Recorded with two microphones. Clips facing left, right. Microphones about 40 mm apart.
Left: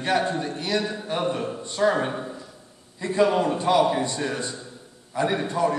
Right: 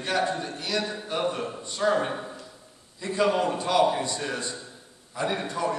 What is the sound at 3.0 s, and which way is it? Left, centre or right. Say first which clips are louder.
A man's voice: left 3 dB; left.